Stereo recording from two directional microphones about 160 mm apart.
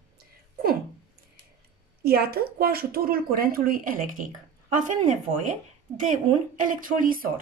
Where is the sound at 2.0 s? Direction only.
75° right (ahead or behind); by 4.3 s 60° right (ahead or behind).